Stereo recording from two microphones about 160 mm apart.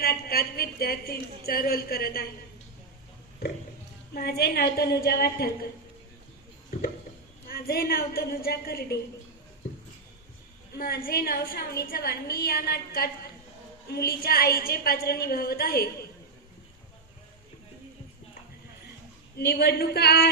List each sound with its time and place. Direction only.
0.0 s a woman's voice: 75° left (ahead or behind)
4.1 s a woman's voice: 80° left
7.4 s a woman's voice: 70° left (ahead or behind)
10.8 s a woman's voice: 70° left (ahead or behind)
19.4 s a woman's voice: 85° left